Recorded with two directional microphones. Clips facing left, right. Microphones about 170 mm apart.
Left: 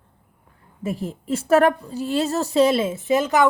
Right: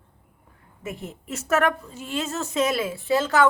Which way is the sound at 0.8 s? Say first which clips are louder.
Left 8 dB; 35° left (ahead or behind).